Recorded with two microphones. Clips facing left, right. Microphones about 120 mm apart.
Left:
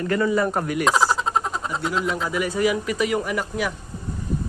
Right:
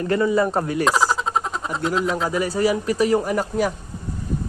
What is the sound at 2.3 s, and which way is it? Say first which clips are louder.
Speech: even; 35° right (ahead or behind).